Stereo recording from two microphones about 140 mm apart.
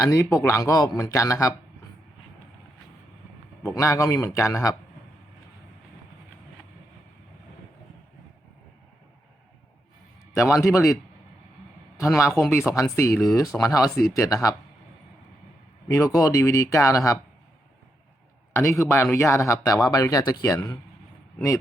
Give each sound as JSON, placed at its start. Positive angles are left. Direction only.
{"t": 0.0, "sound": "speech", "side_deg": 20}
{"t": 3.6, "sound": "speech", "side_deg": 20}
{"t": 10.3, "sound": "speech", "side_deg": 20}
{"t": 11.9, "sound": "speech", "side_deg": 20}
{"t": 15.9, "sound": "speech", "side_deg": 25}
{"t": 18.5, "sound": "speech", "side_deg": 20}